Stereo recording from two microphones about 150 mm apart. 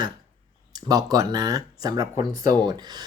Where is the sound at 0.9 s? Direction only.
25° right (ahead or behind).